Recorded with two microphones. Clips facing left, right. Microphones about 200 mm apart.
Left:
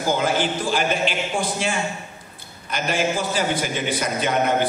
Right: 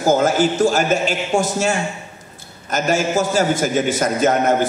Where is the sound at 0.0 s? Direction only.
45° right (ahead or behind).